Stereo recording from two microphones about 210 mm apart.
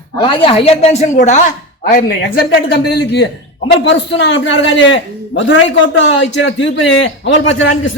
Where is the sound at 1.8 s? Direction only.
45° left (ahead or behind).